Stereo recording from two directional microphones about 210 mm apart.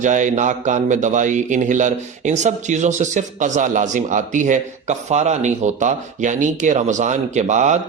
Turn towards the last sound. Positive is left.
turn(degrees=-35)  # may be behind; listen again after turning